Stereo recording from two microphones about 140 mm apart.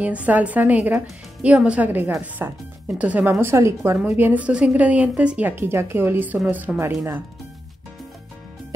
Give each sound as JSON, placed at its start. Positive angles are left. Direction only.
{"t": 0.0, "sound": "speech", "side_deg": -10}